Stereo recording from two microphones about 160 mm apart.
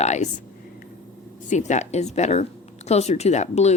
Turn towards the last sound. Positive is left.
turn(degrees=45)  # may be behind; listen again after turning